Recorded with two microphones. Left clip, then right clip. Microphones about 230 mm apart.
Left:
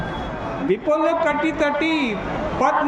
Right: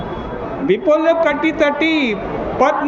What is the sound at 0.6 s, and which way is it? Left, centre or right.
A man's voice, centre.